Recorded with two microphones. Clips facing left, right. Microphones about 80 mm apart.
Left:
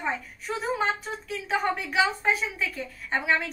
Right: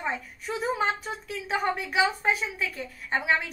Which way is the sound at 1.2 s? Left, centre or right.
Centre.